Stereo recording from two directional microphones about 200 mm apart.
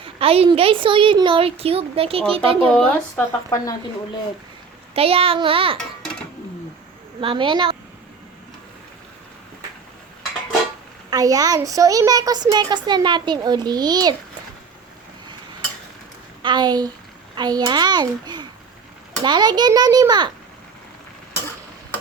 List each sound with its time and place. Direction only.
0.0 s a woman's voice: 30° right (ahead or behind)
2.6 s speech: 10° left (ahead or behind)
4.9 s a woman's voice: 30° right (ahead or behind)
7.2 s a woman's voice: 25° right (ahead or behind)
11.1 s a woman's voice: 20° right (ahead or behind)
16.4 s a woman's voice: 20° right (ahead or behind)